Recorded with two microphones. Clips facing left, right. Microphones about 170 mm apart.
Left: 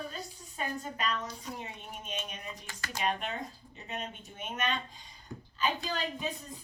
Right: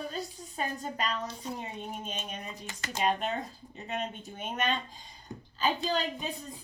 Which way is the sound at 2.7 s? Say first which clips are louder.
Right 4 dB; 20° right (ahead or behind).